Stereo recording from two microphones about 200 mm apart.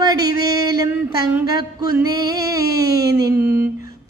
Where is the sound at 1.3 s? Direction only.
20° right (ahead or behind).